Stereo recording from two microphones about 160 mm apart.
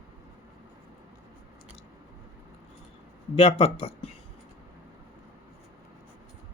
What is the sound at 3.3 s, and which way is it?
Speech, 40° left (ahead or behind).